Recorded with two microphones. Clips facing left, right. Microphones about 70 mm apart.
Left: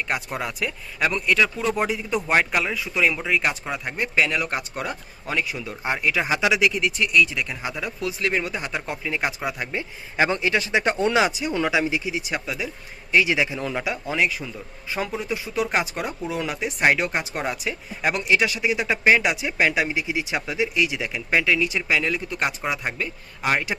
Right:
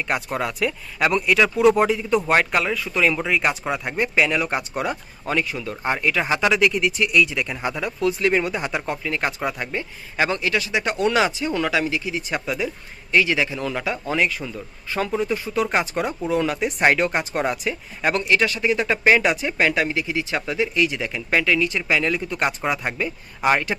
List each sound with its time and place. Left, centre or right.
0.1 s speech: centre
10.2 s speech: left
11.2 s speech: centre
12.2 s speech: centre